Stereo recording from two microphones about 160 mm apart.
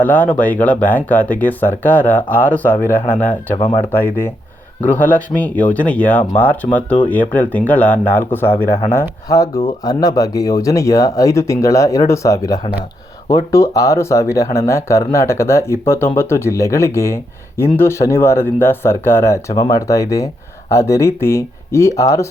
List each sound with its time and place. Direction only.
0.0 s speech: 10° left (ahead or behind)